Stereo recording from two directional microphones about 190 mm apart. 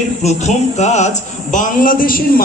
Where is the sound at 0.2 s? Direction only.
35° left (ahead or behind).